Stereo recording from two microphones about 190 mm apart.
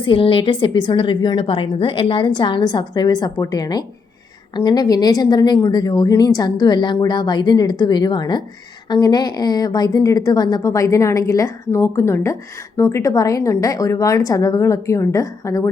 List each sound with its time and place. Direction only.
0.0 s a woman's voice: 25° left (ahead or behind)